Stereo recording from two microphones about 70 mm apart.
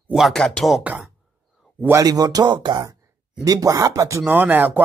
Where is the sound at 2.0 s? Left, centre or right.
Right.